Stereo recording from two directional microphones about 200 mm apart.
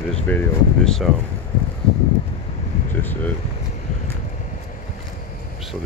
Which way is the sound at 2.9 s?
10° left (ahead or behind).